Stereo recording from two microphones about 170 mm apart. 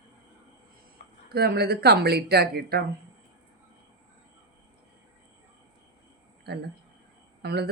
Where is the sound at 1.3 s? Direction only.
65° right (ahead or behind).